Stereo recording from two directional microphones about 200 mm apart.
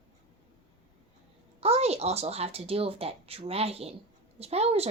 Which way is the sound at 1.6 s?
30° right (ahead or behind).